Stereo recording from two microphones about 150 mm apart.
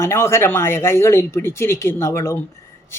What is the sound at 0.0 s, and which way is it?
Speech, 15° left (ahead or behind).